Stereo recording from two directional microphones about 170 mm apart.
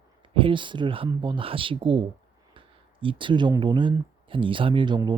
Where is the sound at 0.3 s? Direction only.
30° right (ahead or behind).